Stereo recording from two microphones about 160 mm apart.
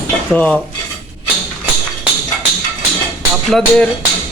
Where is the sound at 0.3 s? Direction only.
5° left (ahead or behind).